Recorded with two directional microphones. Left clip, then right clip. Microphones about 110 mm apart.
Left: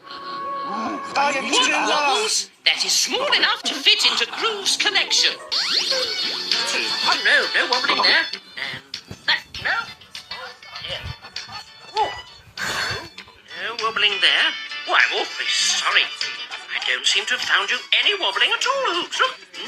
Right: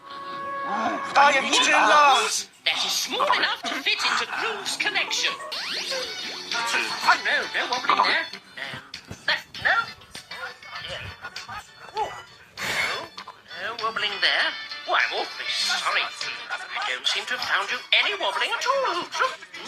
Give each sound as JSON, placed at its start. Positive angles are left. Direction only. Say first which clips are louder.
{"t": 0.1, "sound": "speech", "louder": "left 3 dB", "side_deg": 35}
{"t": 8.9, "sound": "dog", "louder": "left 4 dB", "side_deg": 15}
{"t": 9.6, "sound": "music", "louder": "right 2 dB", "side_deg": 5}
{"t": 10.8, "sound": "music", "louder": "left 6 dB", "side_deg": 30}
{"t": 11.5, "sound": "music", "louder": "left 7 dB", "side_deg": 45}
{"t": 13.5, "sound": "speech", "louder": "left 4 dB", "side_deg": 20}